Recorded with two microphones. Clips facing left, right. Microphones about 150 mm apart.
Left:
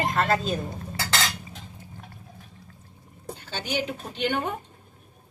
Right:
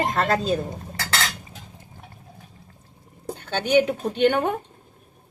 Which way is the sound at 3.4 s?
60° right (ahead or behind).